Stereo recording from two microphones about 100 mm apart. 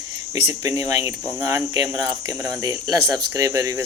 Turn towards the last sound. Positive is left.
turn(degrees=-30)  # may be behind; listen again after turning